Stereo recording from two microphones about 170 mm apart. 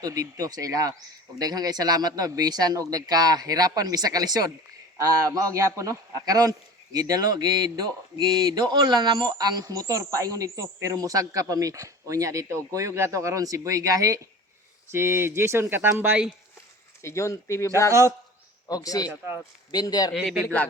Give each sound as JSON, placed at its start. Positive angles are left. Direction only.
{"t": 0.0, "sound": "a man's voice", "side_deg": -20}
{"t": 17.0, "sound": "speech", "side_deg": 15}
{"t": 18.7, "sound": "speech", "side_deg": 20}
{"t": 19.0, "sound": "speech", "side_deg": -15}
{"t": 19.7, "sound": "speech", "side_deg": 20}
{"t": 20.1, "sound": "a man's voice", "side_deg": 0}